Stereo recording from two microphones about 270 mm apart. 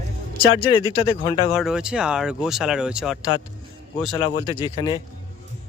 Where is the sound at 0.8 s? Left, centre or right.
Centre.